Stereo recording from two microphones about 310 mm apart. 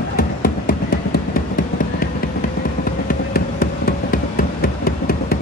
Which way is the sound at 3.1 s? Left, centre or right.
Left.